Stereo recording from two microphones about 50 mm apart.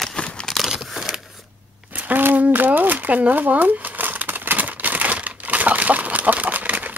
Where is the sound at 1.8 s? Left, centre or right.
Right.